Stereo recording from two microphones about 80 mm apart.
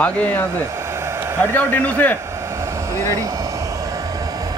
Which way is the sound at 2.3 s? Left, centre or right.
Right.